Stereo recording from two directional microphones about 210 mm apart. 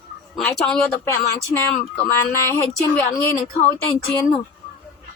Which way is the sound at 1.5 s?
15° left (ahead or behind).